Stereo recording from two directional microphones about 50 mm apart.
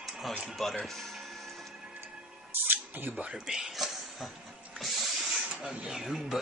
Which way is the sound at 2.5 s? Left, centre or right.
Right.